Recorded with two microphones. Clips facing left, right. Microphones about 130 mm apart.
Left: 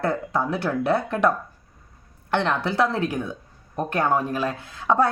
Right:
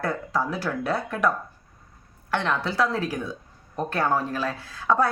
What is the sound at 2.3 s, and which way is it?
A woman's voice, 25° left (ahead or behind).